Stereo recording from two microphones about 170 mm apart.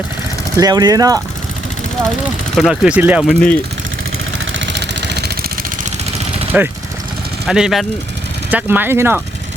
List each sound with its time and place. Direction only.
0.5 s speech: 20° right (ahead or behind)
2.6 s speech: 5° right (ahead or behind)
3.2 s speech: 5° left (ahead or behind)
4.6 s vehicle: 90° right; by 5.5 s 70° right (ahead or behind)
6.5 s speech: 10° right (ahead or behind)